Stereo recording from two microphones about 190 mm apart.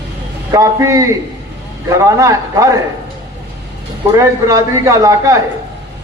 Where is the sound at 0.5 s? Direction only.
15° right (ahead or behind).